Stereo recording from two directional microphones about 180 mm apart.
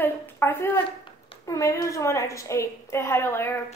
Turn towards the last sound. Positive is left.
turn(degrees=15)  # may be behind; listen again after turning